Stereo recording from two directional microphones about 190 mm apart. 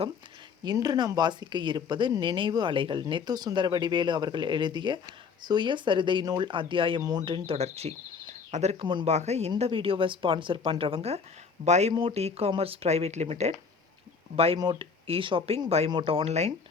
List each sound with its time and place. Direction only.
0.6 s speech: 20° right (ahead or behind)